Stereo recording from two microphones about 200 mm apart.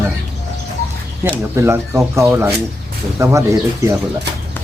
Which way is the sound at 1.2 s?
10° right (ahead or behind).